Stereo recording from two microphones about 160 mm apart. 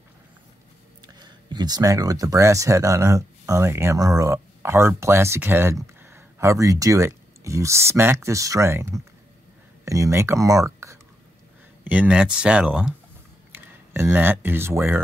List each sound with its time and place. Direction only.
1.0 s speech: 25° right (ahead or behind)
11.8 s speech: 10° right (ahead or behind)